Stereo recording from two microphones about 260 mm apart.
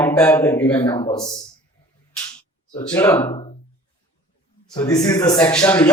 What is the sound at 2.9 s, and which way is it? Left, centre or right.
Speech, centre.